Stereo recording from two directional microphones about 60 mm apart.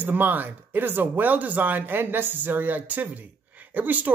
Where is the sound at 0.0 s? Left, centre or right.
Right.